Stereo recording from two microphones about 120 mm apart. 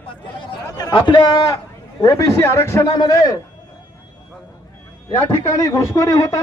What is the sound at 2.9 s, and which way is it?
Speech, 30° left (ahead or behind).